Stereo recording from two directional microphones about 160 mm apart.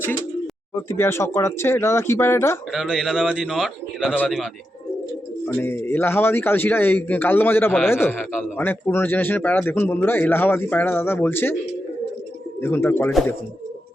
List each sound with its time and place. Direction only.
0.7 s a man's voice: 15° left (ahead or behind)
2.7 s speech: centre (ahead or behind)
5.5 s a man's voice: 15° left (ahead or behind)
12.6 s a man's voice: 15° left (ahead or behind)